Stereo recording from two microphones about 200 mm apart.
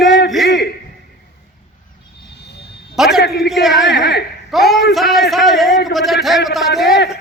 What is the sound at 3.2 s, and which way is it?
Speech, 55° left (ahead or behind).